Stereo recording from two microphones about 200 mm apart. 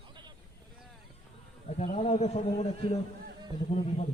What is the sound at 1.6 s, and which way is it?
A man's voice, 30° left (ahead or behind).